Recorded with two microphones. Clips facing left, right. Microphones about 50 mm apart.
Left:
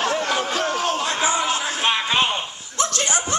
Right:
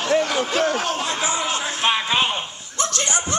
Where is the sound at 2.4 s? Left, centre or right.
Centre.